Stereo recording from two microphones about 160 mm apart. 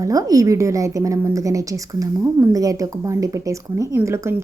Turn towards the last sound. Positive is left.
turn(degrees=-15)  # may be behind; listen again after turning